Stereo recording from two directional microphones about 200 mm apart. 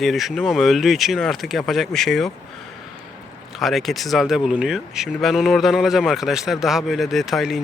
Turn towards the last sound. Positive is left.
turn(degrees=0)  # may be behind; listen again after turning